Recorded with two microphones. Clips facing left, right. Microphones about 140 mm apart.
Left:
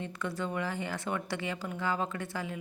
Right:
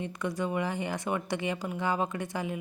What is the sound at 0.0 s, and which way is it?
A woman's voice, 15° right (ahead or behind).